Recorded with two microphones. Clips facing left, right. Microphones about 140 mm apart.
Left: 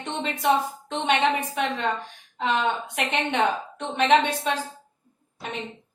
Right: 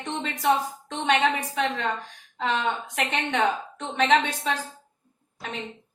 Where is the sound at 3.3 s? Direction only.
20° left (ahead or behind).